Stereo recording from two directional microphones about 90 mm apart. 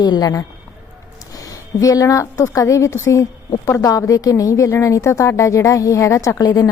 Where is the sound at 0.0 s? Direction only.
45° left (ahead or behind).